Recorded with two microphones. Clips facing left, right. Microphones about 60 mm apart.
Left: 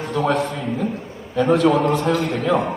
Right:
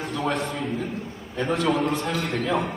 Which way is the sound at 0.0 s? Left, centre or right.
Left.